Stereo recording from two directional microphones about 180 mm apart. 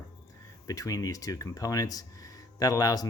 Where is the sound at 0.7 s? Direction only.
20° left (ahead or behind).